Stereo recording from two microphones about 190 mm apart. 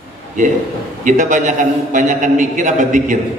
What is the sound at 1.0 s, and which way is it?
A man's voice, 40° right (ahead or behind).